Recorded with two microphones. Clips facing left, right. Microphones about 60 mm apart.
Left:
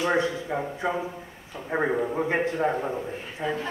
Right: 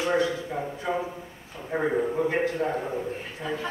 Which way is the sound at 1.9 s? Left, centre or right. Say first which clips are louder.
Even; centre.